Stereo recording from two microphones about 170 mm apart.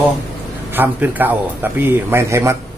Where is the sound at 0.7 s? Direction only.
10° right (ahead or behind).